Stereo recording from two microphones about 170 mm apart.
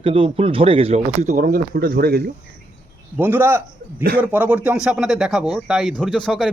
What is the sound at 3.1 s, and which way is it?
Speech, 10° right (ahead or behind).